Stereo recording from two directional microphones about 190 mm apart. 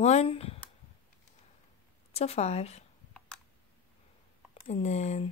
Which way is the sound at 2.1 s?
35° left (ahead or behind).